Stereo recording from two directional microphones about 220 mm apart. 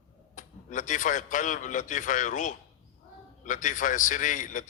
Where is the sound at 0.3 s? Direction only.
35° left (ahead or behind).